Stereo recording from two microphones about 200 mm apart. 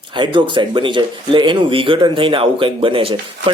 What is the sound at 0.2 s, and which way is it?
Speech, 25° right (ahead or behind).